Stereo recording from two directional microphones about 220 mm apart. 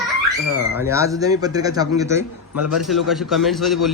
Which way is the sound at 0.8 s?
15° right (ahead or behind).